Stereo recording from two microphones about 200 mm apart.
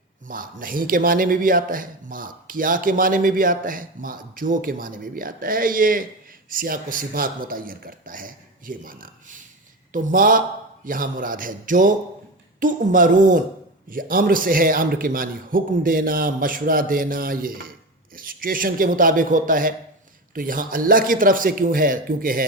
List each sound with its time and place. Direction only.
0.3 s a man's voice: 45° right (ahead or behind)